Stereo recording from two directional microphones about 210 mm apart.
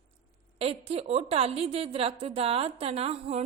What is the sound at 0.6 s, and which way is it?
A woman's voice, 30° right (ahead or behind).